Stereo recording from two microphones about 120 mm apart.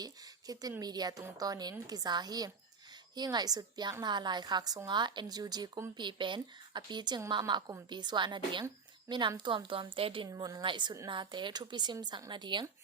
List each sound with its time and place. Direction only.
0.0 s a sound: 30° right (ahead or behind)
0.8 s a woman's voice: 35° right (ahead or behind)
10.2 s a woman's voice: 30° right (ahead or behind)